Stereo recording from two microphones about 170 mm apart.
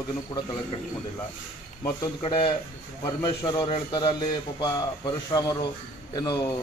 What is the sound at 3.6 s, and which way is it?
A man's voice, 30° left (ahead or behind).